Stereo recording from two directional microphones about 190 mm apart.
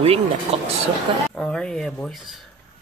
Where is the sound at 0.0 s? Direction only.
30° right (ahead or behind).